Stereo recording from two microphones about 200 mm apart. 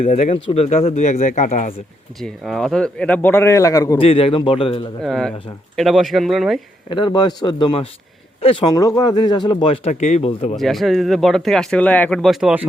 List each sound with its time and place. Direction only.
0.0 s speech: 35° left (ahead or behind)
2.2 s a man's voice: centre (ahead or behind)
4.0 s speech: 30° left (ahead or behind)
5.0 s speech: centre (ahead or behind)
6.9 s speech: 20° left (ahead or behind)
9.9 s speech: 35° left (ahead or behind)
10.6 s speech: centre (ahead or behind)